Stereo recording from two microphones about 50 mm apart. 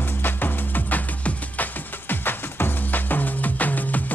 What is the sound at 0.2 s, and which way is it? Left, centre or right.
Music, left.